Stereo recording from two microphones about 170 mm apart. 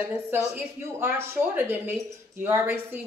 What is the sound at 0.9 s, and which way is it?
Speech, 15° right (ahead or behind).